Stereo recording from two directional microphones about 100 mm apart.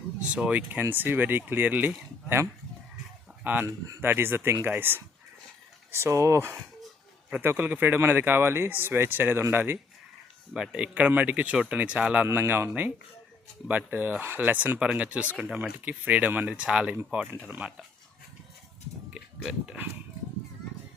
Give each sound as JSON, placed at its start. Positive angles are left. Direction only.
{"t": 0.2, "sound": "speech", "side_deg": -10}
{"t": 3.4, "sound": "speech", "side_deg": -15}
{"t": 3.7, "sound": "speech", "side_deg": -35}
{"t": 4.0, "sound": "speech", "side_deg": -25}
{"t": 10.5, "sound": "speech", "side_deg": -5}
{"t": 19.1, "sound": "speech", "side_deg": -10}